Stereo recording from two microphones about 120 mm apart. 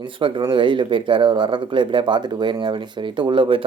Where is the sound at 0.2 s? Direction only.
45° right (ahead or behind).